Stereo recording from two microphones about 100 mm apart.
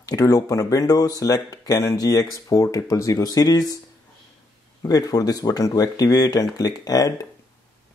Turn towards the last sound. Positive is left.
turn(degrees=35)  # may be behind; listen again after turning